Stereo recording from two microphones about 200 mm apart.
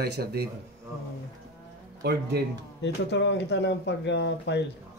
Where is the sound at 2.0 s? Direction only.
55° right (ahead or behind).